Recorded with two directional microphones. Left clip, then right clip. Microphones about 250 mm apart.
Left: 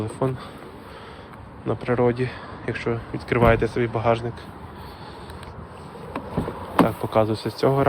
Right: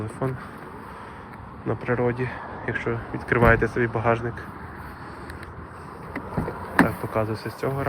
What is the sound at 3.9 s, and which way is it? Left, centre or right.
Speech, centre.